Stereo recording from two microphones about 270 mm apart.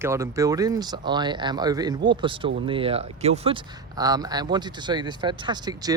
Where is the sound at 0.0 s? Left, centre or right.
Centre.